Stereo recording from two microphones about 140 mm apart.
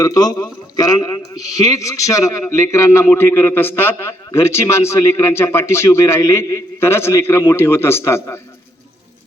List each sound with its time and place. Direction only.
0.0 s a man's voice: 30° left (ahead or behind)